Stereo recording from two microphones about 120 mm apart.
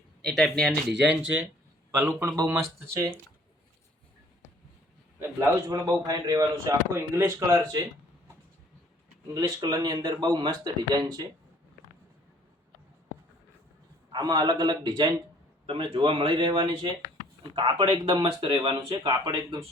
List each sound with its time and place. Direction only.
0.2 s speech: 5° left (ahead or behind)
0.9 s a man's voice: 10° right (ahead or behind)
5.4 s speech: 30° right (ahead or behind)
9.3 s speech: 30° right (ahead or behind)
14.1 s speech: 35° right (ahead or behind)